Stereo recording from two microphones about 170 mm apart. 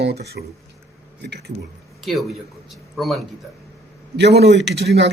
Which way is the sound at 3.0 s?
Centre (ahead or behind).